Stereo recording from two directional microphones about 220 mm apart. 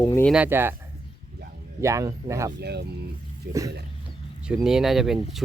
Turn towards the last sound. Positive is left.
turn(degrees=0)  # may be behind; listen again after turning